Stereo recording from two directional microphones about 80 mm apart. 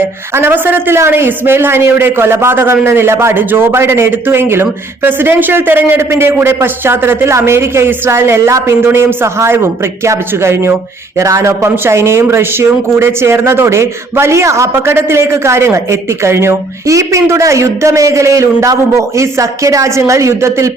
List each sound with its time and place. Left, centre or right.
0.3 s a man's voice: right